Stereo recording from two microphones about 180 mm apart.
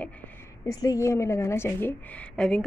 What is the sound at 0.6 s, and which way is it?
A woman's voice, 20° left (ahead or behind).